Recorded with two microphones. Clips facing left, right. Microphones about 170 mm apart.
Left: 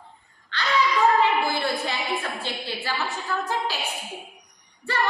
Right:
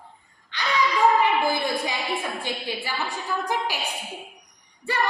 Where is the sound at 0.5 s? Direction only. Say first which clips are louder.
Left 1 dB; 15° right (ahead or behind).